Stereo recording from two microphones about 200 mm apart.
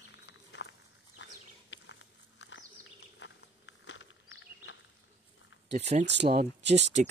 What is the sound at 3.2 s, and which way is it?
Walk, 70° left (ahead or behind).